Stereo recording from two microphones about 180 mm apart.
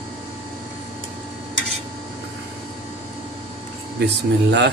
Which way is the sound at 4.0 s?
70° right (ahead or behind).